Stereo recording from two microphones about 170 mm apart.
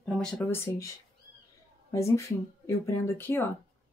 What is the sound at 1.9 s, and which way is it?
A woman's voice, 15° left (ahead or behind).